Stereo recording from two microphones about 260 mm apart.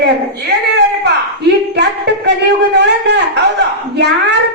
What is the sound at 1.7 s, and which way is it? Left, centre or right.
A woman's voice, right.